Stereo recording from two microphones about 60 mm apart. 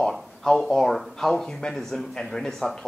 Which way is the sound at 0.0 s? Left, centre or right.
Centre.